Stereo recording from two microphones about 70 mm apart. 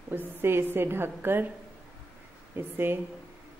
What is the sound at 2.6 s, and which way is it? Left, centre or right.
Speech, right.